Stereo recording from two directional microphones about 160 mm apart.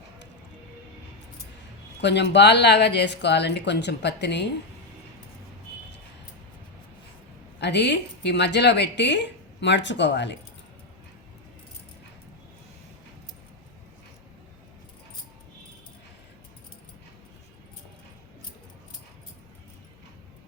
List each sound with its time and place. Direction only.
2.0 s a woman's voice: 90° left
7.6 s a woman's voice: 90° left